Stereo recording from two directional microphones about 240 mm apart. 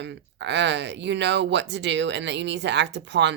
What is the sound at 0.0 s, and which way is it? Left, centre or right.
Speech, right.